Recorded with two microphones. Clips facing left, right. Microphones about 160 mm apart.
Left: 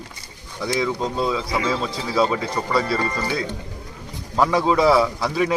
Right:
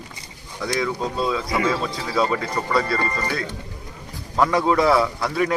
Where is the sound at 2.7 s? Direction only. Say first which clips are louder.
Left 1 dB; 5° left (ahead or behind).